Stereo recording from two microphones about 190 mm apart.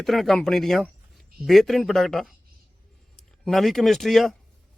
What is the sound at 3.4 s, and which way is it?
Speech, centre (ahead or behind).